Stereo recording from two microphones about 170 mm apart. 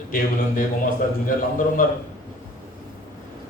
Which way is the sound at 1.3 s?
50° left (ahead or behind).